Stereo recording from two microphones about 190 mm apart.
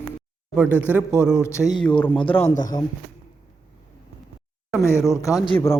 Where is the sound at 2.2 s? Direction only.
30° left (ahead or behind).